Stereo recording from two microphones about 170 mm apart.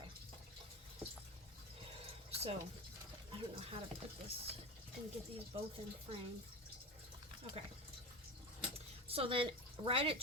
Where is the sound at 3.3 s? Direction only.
35° right (ahead or behind).